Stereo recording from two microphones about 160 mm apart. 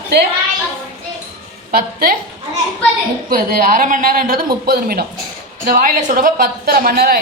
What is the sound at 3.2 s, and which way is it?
A woman's voice, 65° right (ahead or behind).